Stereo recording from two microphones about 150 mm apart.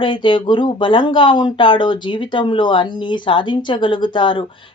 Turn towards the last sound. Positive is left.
turn(degrees=35)  # may be behind; listen again after turning